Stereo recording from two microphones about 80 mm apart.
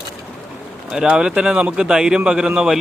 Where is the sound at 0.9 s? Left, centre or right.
Centre.